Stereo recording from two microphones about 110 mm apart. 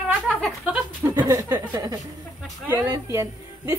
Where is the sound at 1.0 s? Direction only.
35° right (ahead or behind).